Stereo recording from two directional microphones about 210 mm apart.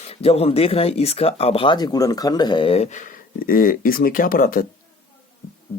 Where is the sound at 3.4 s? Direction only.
45° left (ahead or behind).